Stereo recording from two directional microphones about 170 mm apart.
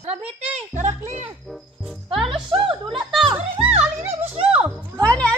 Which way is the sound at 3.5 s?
35° right (ahead or behind).